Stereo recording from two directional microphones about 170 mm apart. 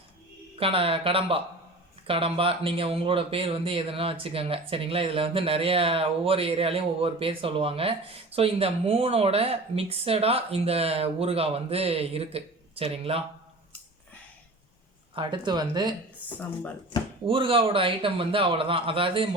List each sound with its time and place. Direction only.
0.6 s speech: 35° right (ahead or behind)
15.1 s speech: 30° right (ahead or behind)
17.2 s speech: 30° right (ahead or behind)